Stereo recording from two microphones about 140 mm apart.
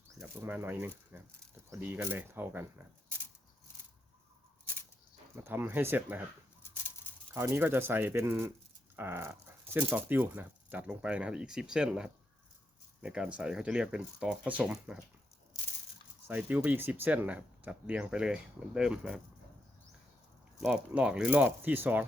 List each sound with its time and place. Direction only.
0.4 s speech: 15° right (ahead or behind)
5.4 s speech: 15° right (ahead or behind)
6.6 s a sound: 20° left (ahead or behind)
7.3 s speech: 15° right (ahead or behind)
16.2 s speech: 10° right (ahead or behind)
20.6 s speech: 5° right (ahead or behind)